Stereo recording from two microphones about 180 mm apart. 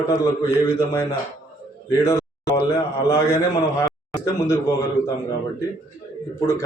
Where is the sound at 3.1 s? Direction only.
20° left (ahead or behind).